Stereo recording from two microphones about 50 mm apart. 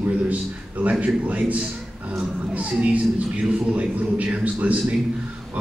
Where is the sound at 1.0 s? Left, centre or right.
Right.